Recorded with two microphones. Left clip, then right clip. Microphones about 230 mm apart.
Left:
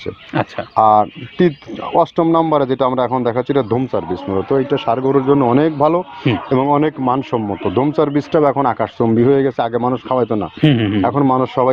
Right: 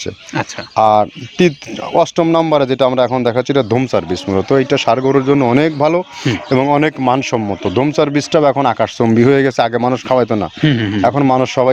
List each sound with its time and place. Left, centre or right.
0.3 s speech: centre
0.8 s speech: right
10.6 s speech: right
11.0 s speech: right